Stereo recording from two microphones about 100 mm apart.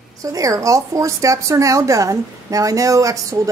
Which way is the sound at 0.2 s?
35° right (ahead or behind).